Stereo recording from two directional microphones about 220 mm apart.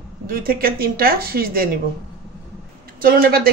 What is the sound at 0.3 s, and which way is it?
Speech, 40° right (ahead or behind).